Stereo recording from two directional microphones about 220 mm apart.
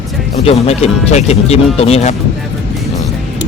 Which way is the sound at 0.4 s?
30° left (ahead or behind).